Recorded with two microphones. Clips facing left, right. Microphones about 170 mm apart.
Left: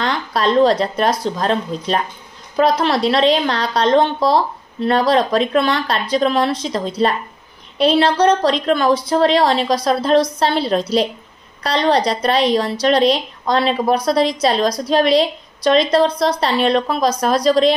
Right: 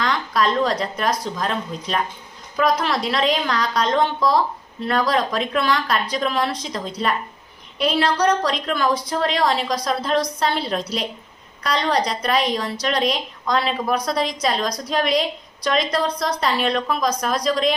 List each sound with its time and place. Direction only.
0.0 s a woman's voice: 30° left (ahead or behind)